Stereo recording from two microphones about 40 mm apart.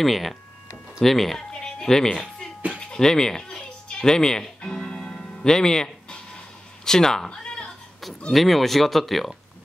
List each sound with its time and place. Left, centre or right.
0.0 s speech: centre
1.6 s music: centre
6.8 s speech: centre
7.2 s a sound: left
8.3 s speech: centre